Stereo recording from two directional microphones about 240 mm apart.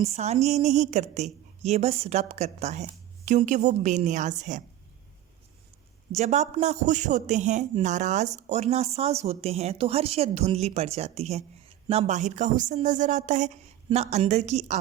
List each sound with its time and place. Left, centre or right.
0.0 s a man's voice: right
6.1 s a man's voice: right